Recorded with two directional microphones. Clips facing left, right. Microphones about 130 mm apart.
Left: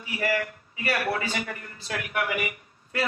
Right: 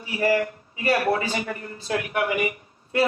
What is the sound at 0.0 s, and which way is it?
A man's voice, 35° right (ahead or behind).